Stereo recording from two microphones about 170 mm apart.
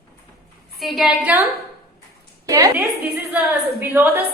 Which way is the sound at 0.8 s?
Centre (ahead or behind).